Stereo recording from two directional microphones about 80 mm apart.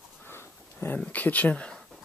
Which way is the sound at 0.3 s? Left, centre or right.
Left.